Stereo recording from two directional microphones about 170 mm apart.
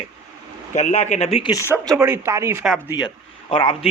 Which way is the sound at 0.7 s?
45° left (ahead or behind).